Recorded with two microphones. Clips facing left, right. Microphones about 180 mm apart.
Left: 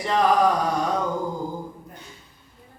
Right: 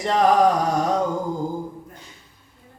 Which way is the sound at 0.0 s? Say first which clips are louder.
Right 2 dB; 40° right (ahead or behind).